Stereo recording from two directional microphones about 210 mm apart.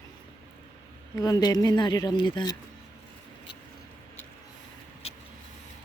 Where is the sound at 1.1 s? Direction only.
15° left (ahead or behind).